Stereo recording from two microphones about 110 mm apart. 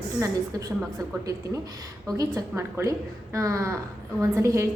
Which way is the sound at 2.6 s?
25° right (ahead or behind).